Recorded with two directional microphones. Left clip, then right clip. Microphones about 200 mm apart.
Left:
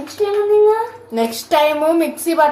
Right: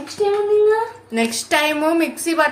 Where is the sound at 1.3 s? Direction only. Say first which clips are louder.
Left 4 dB; 50° right (ahead or behind).